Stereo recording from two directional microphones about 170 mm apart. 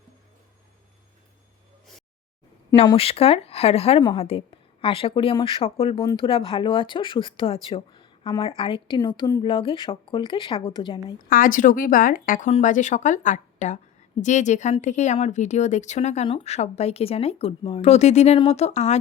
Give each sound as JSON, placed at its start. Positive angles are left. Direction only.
{"t": 2.8, "sound": "speech", "side_deg": 35}
{"t": 11.2, "sound": "speech", "side_deg": 55}